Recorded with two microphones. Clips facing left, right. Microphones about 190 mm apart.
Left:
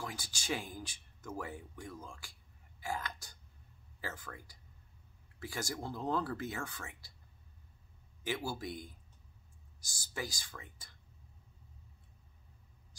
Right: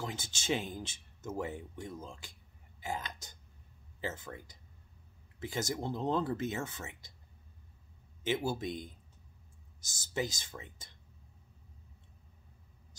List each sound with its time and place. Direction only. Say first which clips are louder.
0.0 s speech: right 4 dB; 25° right (ahead or behind)
8.2 s speech: right 5 dB; 20° right (ahead or behind)